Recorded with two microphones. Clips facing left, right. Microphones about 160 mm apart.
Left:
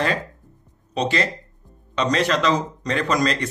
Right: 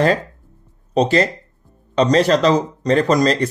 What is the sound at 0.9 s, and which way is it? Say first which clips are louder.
Speech: right 7 dB; 40° right (ahead or behind).